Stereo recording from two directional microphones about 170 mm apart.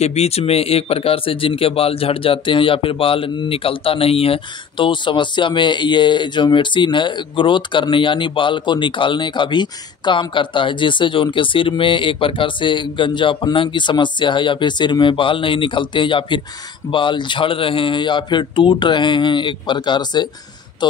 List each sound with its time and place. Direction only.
0.0 s speech: 40° left (ahead or behind)